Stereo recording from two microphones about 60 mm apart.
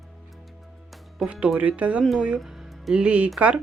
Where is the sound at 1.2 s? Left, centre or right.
Right.